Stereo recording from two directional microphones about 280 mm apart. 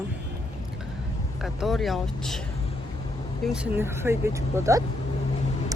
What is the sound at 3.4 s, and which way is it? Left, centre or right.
Speech, centre.